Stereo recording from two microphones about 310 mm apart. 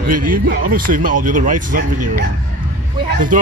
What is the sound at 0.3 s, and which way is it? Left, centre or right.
Speech, right.